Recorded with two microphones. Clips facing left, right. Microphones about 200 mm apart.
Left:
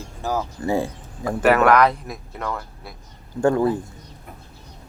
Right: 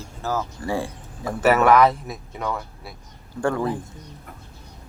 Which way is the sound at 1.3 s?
Centre (ahead or behind).